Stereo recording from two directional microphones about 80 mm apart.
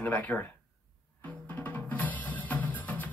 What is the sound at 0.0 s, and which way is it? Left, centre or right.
Speech, centre.